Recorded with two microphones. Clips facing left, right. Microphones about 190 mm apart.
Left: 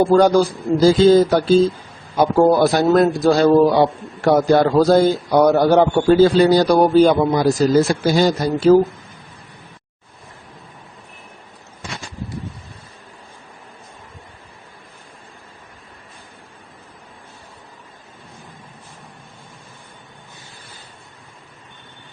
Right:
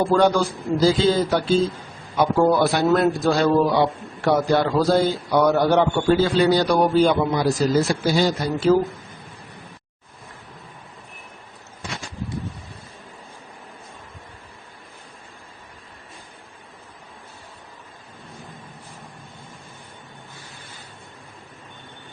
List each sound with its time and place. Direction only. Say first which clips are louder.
0.0 s a man's voice: left 5 dB; 40° left (ahead or behind)